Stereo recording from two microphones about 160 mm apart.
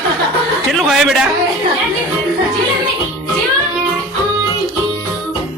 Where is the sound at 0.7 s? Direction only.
Centre (ahead or behind).